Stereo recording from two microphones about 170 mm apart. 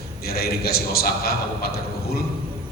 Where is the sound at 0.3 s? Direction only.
65° left (ahead or behind).